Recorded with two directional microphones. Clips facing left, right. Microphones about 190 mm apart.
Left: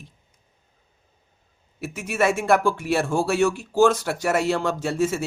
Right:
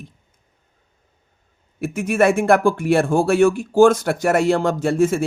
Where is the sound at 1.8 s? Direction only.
50° right (ahead or behind).